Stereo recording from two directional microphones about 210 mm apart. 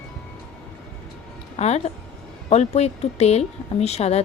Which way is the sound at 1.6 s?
30° left (ahead or behind).